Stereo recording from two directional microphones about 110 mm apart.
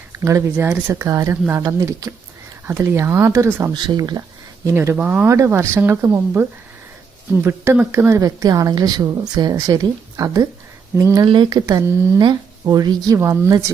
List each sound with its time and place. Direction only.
0.1 s speech: 25° right (ahead or behind)
3.8 s a woman's voice: 40° right (ahead or behind)
4.6 s a woman's voice: 25° right (ahead or behind)
11.2 s a woman's voice: 40° right (ahead or behind)
11.6 s a woman's voice: 25° right (ahead or behind)
13.1 s speech: 20° right (ahead or behind)